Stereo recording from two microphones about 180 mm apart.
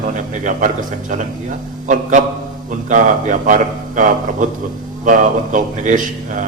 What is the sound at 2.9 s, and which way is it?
A man's voice, 45° right (ahead or behind).